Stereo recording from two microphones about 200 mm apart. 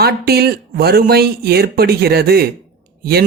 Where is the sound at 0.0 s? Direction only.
50° right (ahead or behind).